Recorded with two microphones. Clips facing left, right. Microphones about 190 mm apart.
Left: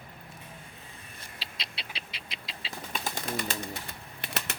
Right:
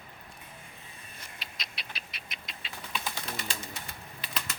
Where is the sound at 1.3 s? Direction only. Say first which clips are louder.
Left 3 dB; 30° left (ahead or behind).